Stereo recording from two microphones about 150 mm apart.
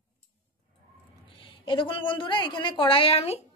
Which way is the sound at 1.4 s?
35° left (ahead or behind).